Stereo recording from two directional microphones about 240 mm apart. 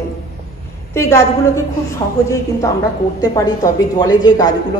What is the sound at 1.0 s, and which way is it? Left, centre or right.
Speech, centre.